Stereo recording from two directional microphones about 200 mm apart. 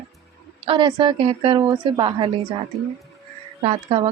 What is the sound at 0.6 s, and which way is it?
A woman's voice, 25° right (ahead or behind).